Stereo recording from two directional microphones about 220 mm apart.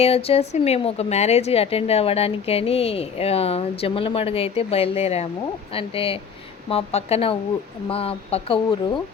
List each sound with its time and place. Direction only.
0.0 s a woman's voice: 25° left (ahead or behind)